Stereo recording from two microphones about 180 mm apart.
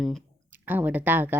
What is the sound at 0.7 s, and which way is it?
Speech, 10° right (ahead or behind).